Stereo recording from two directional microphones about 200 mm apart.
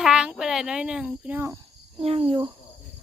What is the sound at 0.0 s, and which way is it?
Speech, 5° right (ahead or behind).